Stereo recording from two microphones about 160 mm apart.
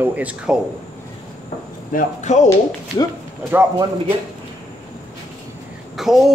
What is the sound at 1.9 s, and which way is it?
Speech, 45° left (ahead or behind).